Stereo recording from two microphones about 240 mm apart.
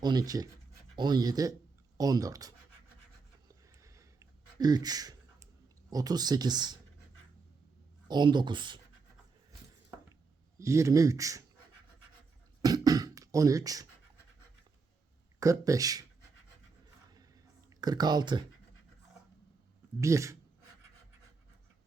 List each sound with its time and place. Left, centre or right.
0.0 s speech: centre
3.5 s a sound: centre
5.9 s speech: centre
8.0 s speech: centre
10.6 s speech: centre
12.6 s speech: centre
15.4 s speech: centre
17.7 s speech: centre
20.0 s speech: centre